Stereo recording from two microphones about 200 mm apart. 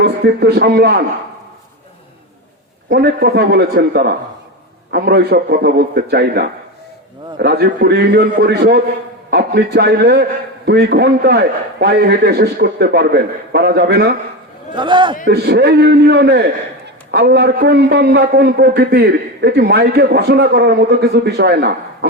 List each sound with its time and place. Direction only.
0.0 s a man's voice: 55° right (ahead or behind)
2.9 s a man's voice: 50° right (ahead or behind)
14.8 s a man's voice: 25° right (ahead or behind)
15.3 s a man's voice: 55° right (ahead or behind)